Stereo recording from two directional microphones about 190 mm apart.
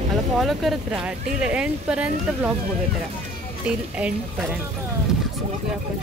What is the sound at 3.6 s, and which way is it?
Speech, 5° right (ahead or behind).